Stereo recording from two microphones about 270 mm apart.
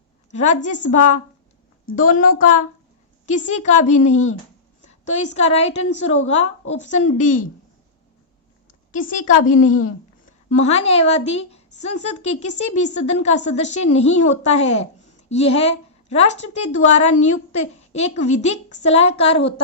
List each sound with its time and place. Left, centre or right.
0.3 s a woman's voice: left
8.9 s a woman's voice: left